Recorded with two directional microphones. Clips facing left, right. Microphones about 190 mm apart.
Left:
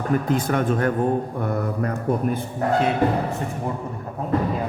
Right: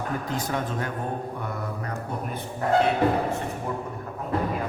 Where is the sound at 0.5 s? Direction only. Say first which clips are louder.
Left 8 dB; 55° left (ahead or behind).